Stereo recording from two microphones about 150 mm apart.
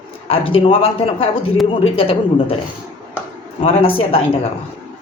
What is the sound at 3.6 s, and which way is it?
Speech, 40° left (ahead or behind).